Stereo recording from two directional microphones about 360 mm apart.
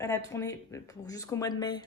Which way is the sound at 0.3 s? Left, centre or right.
Centre.